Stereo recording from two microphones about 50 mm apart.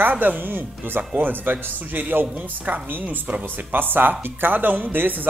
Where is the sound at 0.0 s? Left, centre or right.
Right.